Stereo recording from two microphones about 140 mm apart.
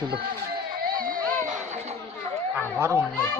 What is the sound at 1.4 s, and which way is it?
Chatter, 60° right (ahead or behind).